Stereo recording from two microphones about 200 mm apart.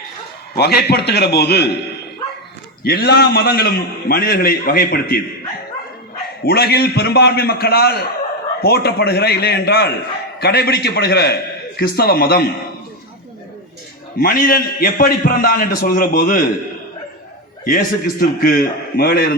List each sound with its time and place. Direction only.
0.5 s a man's voice: 55° left (ahead or behind)
2.8 s a man's voice: 50° left (ahead or behind)
6.4 s a man's voice: 55° left (ahead or behind)
14.2 s a man's voice: 45° left (ahead or behind)
17.7 s a man's voice: 45° left (ahead or behind)